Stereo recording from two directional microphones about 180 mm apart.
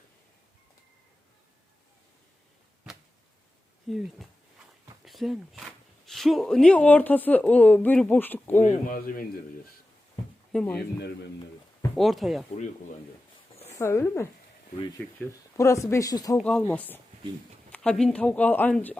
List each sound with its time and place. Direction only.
3.8 s speech: centre (ahead or behind)
8.6 s a man's voice: 45° left (ahead or behind)
10.5 s speech: 5° left (ahead or behind)
11.9 s speech: centre (ahead or behind)
13.7 s speech: 15° left (ahead or behind)
16.4 s speech: 5° left (ahead or behind)